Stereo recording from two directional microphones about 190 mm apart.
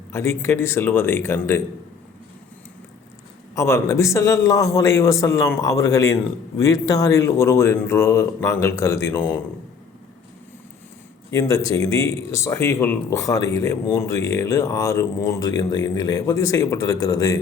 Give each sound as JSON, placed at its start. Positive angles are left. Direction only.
{"t": 0.1, "sound": "speech", "side_deg": 15}
{"t": 3.5, "sound": "speech", "side_deg": 15}
{"t": 11.3, "sound": "speech", "side_deg": 15}